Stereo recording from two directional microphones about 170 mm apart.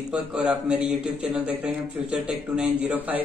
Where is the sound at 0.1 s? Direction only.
5° right (ahead or behind).